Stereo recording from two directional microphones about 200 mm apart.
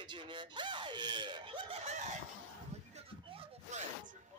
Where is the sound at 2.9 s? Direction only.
30° right (ahead or behind).